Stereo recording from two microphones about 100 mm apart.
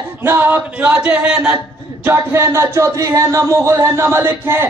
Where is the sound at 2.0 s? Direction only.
25° right (ahead or behind).